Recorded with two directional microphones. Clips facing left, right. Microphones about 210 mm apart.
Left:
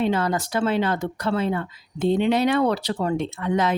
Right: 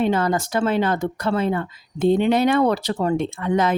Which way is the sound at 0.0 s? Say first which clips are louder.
Right 2 dB; 50° right (ahead or behind).